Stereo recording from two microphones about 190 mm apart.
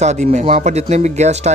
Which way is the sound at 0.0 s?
40° right (ahead or behind).